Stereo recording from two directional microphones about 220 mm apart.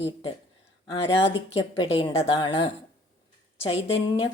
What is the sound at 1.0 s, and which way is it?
Speech, 55° left (ahead or behind).